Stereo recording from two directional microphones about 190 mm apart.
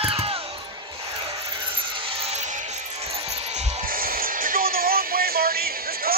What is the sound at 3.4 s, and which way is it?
Music, 35° right (ahead or behind).